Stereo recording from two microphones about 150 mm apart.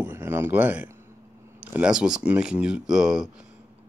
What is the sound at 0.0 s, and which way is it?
Speech, 15° right (ahead or behind).